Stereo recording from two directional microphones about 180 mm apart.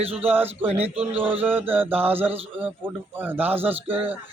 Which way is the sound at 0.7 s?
35° right (ahead or behind).